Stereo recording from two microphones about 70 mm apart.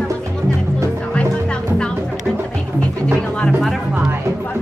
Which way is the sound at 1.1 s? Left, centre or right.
Centre.